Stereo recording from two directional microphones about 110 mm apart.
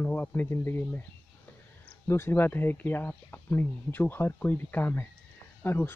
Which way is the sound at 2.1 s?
20° left (ahead or behind).